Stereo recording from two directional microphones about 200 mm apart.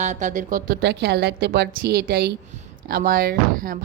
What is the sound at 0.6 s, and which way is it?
A woman's voice, 60° right (ahead or behind).